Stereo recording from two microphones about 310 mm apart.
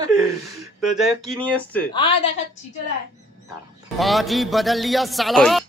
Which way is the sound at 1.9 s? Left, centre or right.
Centre.